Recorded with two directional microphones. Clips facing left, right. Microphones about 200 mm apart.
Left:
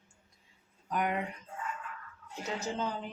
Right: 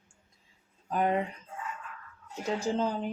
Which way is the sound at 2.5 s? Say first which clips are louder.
Right 6 dB; 30° right (ahead or behind).